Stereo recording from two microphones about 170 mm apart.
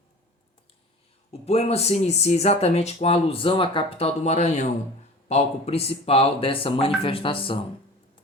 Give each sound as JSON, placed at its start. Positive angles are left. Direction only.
{"t": 1.3, "sound": "speech", "side_deg": 40}